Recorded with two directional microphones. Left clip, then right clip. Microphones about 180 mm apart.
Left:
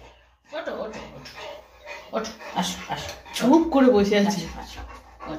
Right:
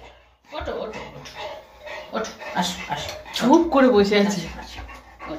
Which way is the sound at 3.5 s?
5° left (ahead or behind).